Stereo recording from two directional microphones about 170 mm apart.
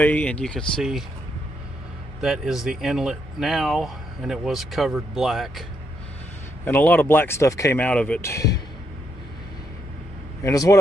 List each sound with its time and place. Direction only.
0.0 s speech: 10° left (ahead or behind)
2.2 s speech: 5° right (ahead or behind)
6.7 s speech: 10° left (ahead or behind)
10.4 s speech: 20° left (ahead or behind)